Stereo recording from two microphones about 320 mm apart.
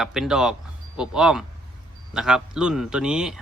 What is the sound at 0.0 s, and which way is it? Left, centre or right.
A man's voice, centre.